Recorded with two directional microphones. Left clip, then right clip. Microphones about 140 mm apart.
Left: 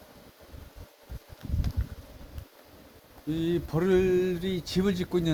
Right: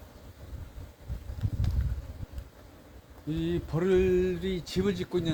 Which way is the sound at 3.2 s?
70° left (ahead or behind).